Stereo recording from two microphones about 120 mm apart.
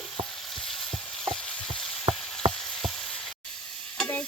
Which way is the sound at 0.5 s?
Centre (ahead or behind).